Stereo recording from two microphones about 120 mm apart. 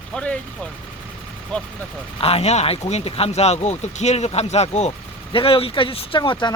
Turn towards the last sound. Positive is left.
turn(degrees=45)  # may be behind; listen again after turning